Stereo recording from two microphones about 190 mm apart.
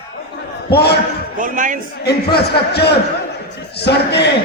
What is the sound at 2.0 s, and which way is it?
A man's voice, 60° left (ahead or behind).